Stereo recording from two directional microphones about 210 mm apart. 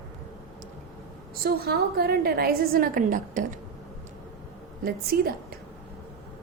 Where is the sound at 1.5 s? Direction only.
45° right (ahead or behind).